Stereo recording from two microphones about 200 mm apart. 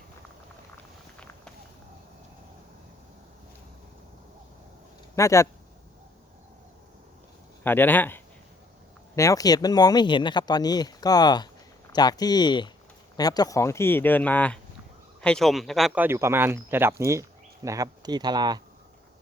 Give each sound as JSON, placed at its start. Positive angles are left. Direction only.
{"t": 5.1, "sound": "speech", "side_deg": 15}
{"t": 7.6, "sound": "speech", "side_deg": 10}
{"t": 16.0, "sound": "speech", "side_deg": -10}